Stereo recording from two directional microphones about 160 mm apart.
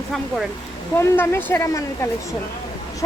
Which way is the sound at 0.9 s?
15° left (ahead or behind).